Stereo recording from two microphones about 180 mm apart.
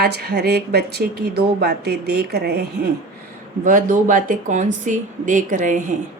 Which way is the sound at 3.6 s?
45° right (ahead or behind).